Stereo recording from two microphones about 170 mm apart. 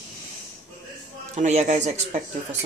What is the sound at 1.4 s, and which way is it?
Speech, 45° right (ahead or behind).